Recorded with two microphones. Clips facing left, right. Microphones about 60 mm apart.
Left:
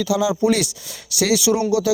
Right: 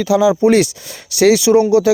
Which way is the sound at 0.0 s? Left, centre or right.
Right.